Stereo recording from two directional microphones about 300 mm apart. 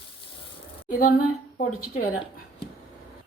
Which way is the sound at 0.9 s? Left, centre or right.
Left.